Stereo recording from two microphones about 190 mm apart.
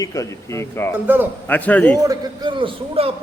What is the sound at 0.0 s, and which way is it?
Speech, 15° left (ahead or behind).